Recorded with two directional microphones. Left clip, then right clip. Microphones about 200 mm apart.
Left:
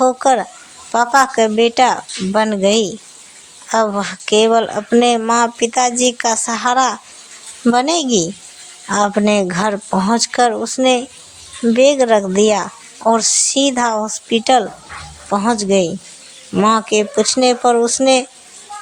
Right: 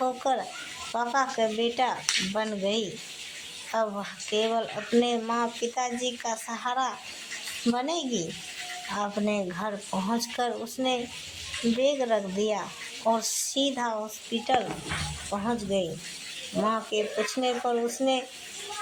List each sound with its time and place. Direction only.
0.0 s speech: 50° left (ahead or behind)